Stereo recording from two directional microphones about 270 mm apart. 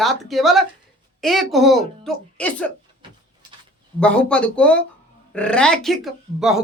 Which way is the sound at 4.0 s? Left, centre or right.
Centre.